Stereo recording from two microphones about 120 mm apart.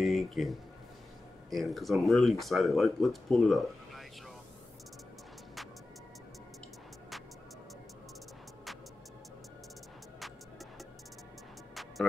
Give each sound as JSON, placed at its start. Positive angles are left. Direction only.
{"t": 0.0, "sound": "speech", "side_deg": 0}
{"t": 11.7, "sound": "music", "side_deg": 0}